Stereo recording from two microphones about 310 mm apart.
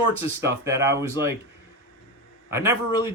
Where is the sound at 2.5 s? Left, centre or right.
Centre.